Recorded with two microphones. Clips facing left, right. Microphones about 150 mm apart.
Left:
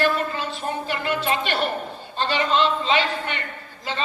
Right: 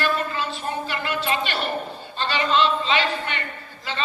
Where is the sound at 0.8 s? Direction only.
45° left (ahead or behind).